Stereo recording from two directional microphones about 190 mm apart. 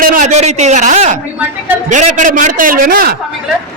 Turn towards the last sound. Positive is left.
turn(degrees=-50)  # may be behind; listen again after turning